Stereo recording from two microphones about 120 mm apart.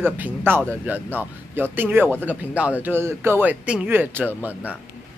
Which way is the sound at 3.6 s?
10° right (ahead or behind).